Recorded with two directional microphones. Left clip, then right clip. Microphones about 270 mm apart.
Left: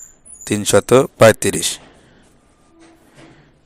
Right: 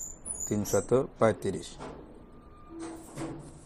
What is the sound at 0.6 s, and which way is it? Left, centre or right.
Speech, left.